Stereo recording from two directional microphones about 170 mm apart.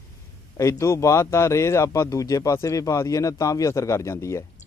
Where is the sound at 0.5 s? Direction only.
20° left (ahead or behind).